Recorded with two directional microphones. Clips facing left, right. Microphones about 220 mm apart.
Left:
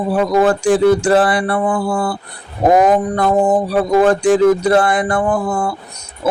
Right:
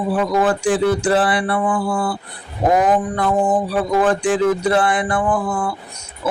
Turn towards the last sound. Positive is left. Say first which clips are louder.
# left 3 dB
turn(degrees=40)  # may be behind; listen again after turning